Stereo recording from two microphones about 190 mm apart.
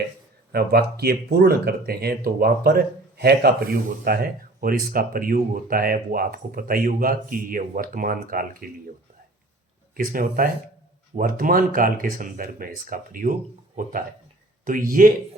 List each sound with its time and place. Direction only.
0.5 s speech: 55° right (ahead or behind)
9.9 s speech: 50° right (ahead or behind)
14.6 s speech: 45° right (ahead or behind)